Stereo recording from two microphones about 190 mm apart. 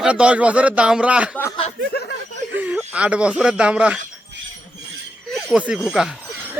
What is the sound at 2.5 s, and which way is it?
Speech, 10° right (ahead or behind).